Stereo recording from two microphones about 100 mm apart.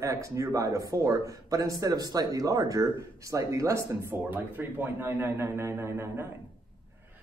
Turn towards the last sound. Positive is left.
turn(degrees=-25)  # may be behind; listen again after turning